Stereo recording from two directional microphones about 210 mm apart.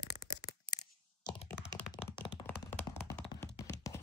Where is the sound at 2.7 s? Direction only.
10° left (ahead or behind).